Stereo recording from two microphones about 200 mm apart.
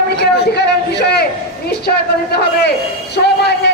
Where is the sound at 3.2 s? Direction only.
55° left (ahead or behind).